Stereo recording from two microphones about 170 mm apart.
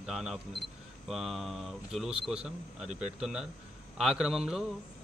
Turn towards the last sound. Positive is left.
turn(degrees=0)  # may be behind; listen again after turning